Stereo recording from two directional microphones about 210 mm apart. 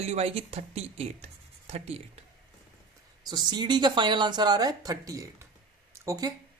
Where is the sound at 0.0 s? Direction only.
30° right (ahead or behind).